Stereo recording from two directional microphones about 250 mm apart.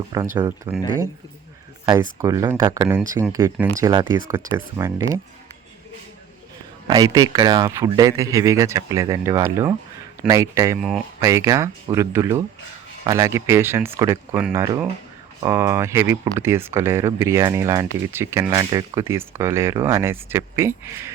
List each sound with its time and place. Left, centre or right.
0.3 s speech: centre
1.8 s speech: centre
6.8 s speech: centre